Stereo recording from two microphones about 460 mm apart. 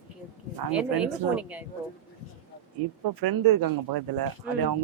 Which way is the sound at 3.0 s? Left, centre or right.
Right.